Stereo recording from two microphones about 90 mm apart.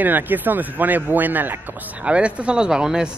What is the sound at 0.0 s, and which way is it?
A man's voice, 20° right (ahead or behind).